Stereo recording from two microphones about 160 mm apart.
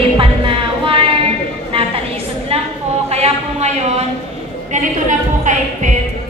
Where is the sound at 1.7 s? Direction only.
35° right (ahead or behind).